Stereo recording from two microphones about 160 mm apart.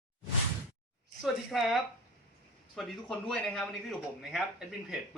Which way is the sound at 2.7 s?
Centre (ahead or behind).